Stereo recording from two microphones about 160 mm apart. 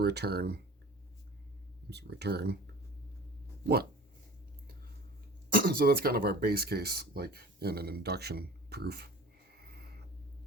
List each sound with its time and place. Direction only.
0.0 s speech: 90° right
1.9 s speech: 90° right
5.5 s speech: 65° right (ahead or behind); by 9.0 s 85° right
9.6 s a sound: 75° right (ahead or behind)